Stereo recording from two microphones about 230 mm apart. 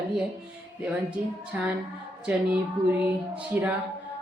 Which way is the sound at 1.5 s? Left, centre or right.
Centre.